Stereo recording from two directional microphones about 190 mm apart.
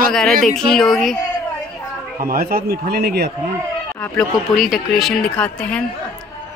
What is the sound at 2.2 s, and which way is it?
A man's voice, 50° right (ahead or behind).